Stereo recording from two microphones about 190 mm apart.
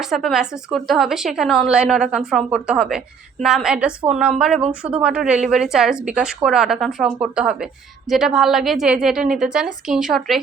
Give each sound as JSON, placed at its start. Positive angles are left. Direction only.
{"t": 0.0, "sound": "a woman's voice", "side_deg": 0}